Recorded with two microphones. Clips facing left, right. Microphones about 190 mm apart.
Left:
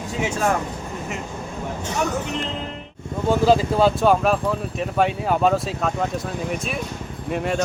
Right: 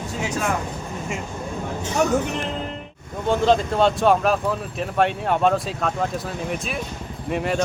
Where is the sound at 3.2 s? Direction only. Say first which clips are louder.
Left 1 dB; 5° left (ahead or behind).